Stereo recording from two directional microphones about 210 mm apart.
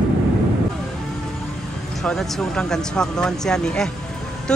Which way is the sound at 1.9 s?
Centre (ahead or behind).